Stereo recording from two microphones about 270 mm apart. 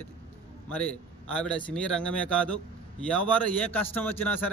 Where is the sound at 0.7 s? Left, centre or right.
Centre.